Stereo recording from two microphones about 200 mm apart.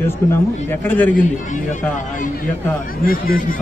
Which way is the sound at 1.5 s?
40° left (ahead or behind).